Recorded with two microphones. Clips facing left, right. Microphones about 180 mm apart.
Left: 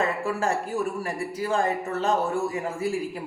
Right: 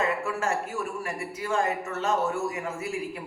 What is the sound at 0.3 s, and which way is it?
Speech, 35° left (ahead or behind).